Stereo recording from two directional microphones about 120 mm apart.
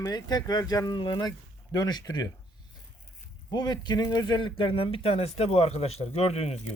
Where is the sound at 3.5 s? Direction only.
35° left (ahead or behind).